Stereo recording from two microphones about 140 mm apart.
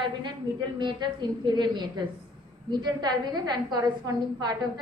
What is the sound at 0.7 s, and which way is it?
A woman's voice, 35° right (ahead or behind).